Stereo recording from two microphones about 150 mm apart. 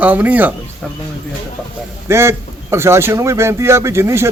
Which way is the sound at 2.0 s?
15° right (ahead or behind).